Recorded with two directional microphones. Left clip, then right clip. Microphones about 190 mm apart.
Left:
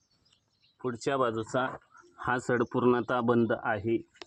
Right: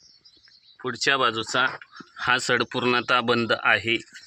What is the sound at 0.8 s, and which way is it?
Speech, 20° right (ahead or behind).